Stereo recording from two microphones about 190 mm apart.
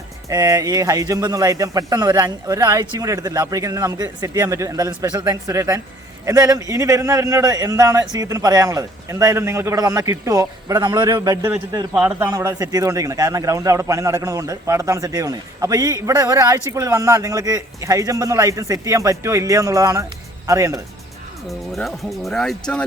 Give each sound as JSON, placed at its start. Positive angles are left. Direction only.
{"t": 0.3, "sound": "a man's voice", "side_deg": -20}
{"t": 12.3, "sound": "a man's voice", "side_deg": -20}
{"t": 21.4, "sound": "speech", "side_deg": 0}